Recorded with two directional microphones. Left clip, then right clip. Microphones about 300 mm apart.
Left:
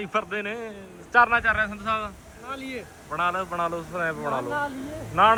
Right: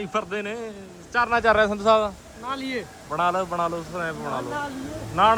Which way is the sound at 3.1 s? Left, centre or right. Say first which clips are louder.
Right 3 dB; centre.